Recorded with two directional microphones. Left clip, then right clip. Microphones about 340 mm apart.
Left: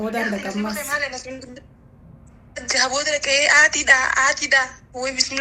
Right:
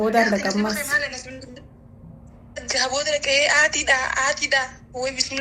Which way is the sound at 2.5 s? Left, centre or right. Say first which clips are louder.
Left 3 dB; left.